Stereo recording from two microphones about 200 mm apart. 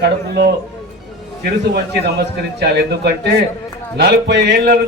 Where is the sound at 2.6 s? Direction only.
55° right (ahead or behind).